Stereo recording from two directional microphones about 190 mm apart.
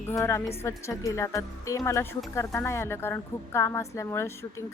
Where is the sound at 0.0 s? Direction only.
15° left (ahead or behind).